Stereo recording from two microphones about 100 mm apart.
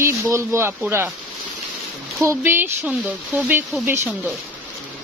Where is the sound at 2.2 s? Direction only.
25° right (ahead or behind).